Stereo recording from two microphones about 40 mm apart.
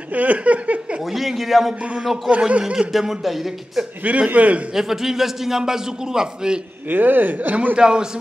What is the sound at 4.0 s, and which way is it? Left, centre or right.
Speech, right.